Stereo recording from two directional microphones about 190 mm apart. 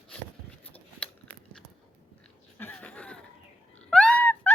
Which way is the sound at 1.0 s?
5° left (ahead or behind).